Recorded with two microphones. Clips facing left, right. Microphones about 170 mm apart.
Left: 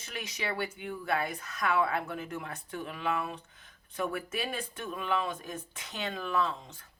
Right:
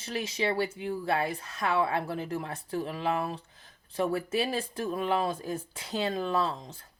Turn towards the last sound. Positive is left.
turn(degrees=-35)  # may be behind; listen again after turning